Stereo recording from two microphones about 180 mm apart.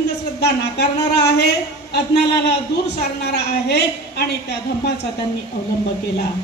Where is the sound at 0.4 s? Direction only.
65° left (ahead or behind).